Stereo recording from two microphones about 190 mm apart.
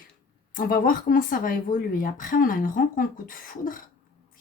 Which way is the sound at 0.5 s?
50° left (ahead or behind).